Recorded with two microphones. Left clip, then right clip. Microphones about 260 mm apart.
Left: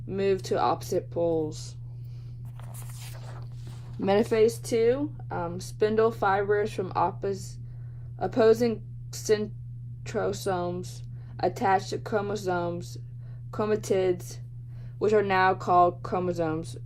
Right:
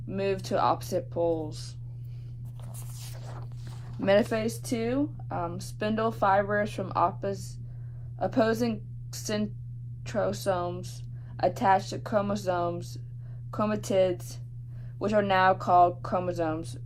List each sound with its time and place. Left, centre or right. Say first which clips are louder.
0.2 s speech: left 2 dB; left
1.2 s speech: left 1 dB; right
1.5 s speech: left 4 dB; left
4.0 s speech: left 2 dB; left